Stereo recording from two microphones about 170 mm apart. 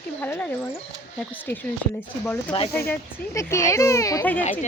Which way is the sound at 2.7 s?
10° left (ahead or behind).